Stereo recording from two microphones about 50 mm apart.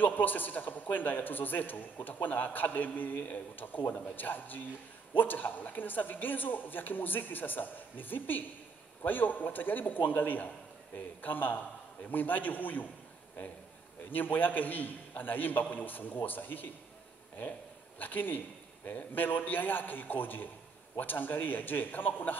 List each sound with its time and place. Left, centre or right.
0.0 s a man's voice: left
14.1 s a man's voice: left